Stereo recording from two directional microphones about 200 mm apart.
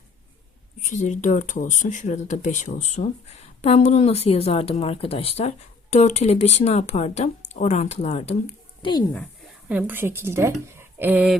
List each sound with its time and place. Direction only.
0.8 s speech: 35° left (ahead or behind)
8.8 s speech: 20° left (ahead or behind)
9.6 s speech: 10° right (ahead or behind)